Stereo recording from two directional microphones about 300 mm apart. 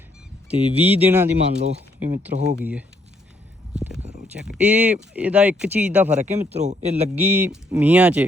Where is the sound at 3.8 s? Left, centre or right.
Centre.